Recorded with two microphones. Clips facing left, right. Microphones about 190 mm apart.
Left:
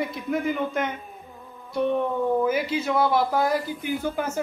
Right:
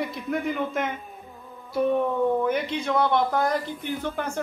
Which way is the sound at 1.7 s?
5° right (ahead or behind).